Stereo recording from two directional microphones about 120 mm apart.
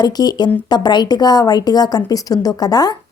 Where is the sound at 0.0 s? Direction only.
35° left (ahead or behind).